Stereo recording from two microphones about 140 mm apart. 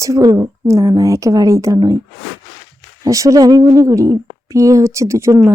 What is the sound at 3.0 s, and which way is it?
A woman's voice, 25° right (ahead or behind).